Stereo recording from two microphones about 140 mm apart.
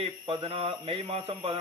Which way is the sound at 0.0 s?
40° right (ahead or behind).